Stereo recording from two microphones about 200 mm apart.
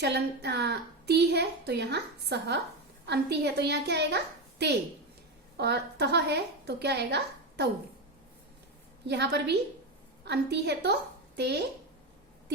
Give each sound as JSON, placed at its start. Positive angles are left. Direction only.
{"t": 0.0, "sound": "a woman's voice", "side_deg": -55}
{"t": 9.0, "sound": "a woman's voice", "side_deg": -55}